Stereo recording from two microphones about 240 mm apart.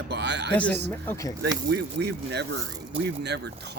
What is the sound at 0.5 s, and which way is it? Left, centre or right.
Speech, centre.